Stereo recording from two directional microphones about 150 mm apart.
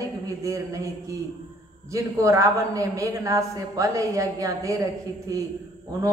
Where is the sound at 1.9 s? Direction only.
20° right (ahead or behind).